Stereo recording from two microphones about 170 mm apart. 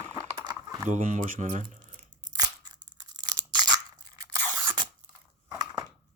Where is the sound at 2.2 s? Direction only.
25° right (ahead or behind).